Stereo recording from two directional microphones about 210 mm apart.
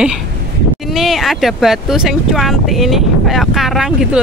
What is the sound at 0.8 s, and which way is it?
Speech, centre (ahead or behind).